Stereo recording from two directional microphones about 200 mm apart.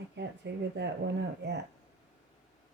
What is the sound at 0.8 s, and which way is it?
Speech, 60° right (ahead or behind).